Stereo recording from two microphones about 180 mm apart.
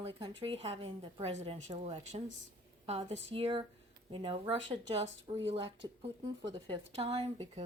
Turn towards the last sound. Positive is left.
turn(degrees=-35)  # may be behind; listen again after turning